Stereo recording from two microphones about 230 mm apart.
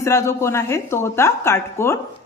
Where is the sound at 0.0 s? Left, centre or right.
Centre.